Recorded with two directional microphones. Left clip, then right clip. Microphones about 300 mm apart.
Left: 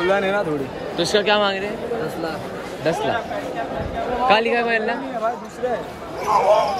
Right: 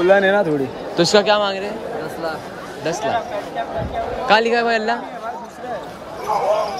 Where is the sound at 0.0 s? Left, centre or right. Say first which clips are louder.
Right 5 dB; right.